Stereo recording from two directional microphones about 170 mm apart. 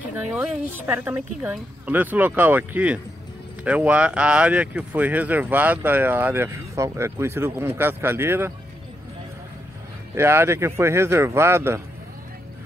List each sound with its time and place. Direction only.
0.3 s speech: 10° right (ahead or behind)
10.1 s speech: 15° right (ahead or behind)